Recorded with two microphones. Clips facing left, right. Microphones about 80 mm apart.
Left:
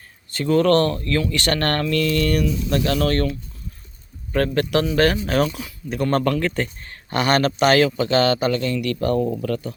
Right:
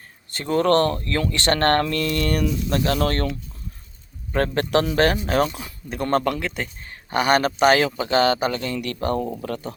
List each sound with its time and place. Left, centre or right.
0.3 s speech: right
4.3 s speech: right
6.1 s speech: centre